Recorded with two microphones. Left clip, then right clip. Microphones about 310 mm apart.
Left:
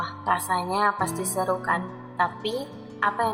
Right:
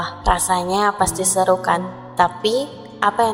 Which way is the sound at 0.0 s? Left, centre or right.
Right.